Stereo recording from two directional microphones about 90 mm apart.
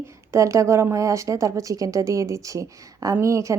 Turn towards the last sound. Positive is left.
turn(degrees=-35)  # may be behind; listen again after turning